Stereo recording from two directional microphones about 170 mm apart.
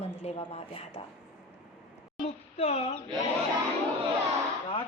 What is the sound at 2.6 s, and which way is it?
Speech, 35° left (ahead or behind).